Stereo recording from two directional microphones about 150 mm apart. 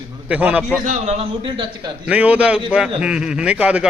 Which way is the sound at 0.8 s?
50° right (ahead or behind).